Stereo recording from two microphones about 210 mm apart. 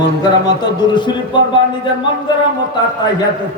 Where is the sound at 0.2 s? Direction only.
20° left (ahead or behind).